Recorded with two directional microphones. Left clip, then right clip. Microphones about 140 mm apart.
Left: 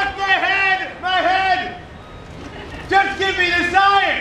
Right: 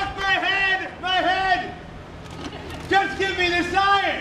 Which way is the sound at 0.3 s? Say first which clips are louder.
Left 4 dB; centre (ahead or behind).